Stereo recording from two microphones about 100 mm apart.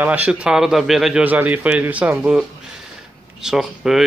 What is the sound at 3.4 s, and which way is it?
Speech, 5° right (ahead or behind).